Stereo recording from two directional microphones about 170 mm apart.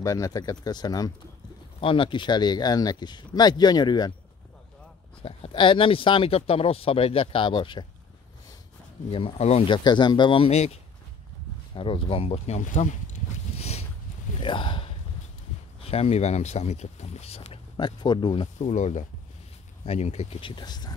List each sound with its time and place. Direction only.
0.0 s speech: 20° left (ahead or behind)
5.2 s speech: 30° left (ahead or behind)
9.1 s speech: 35° left (ahead or behind)
18.6 s speech: 45° left (ahead or behind); by 20.9 s 25° left (ahead or behind)